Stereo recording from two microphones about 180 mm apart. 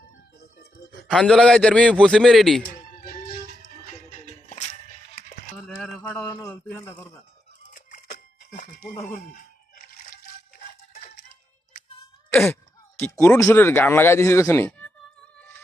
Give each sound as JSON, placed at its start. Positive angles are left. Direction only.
{"t": 1.1, "sound": "a man's voice", "side_deg": 5}
{"t": 2.9, "sound": "music", "side_deg": 45}
{"t": 5.5, "sound": "a sound", "side_deg": 5}
{"t": 6.4, "sound": "speech", "side_deg": 5}
{"t": 7.7, "sound": "a sound", "side_deg": 45}
{"t": 9.1, "sound": "music", "side_deg": 50}
{"t": 12.3, "sound": "speech", "side_deg": 10}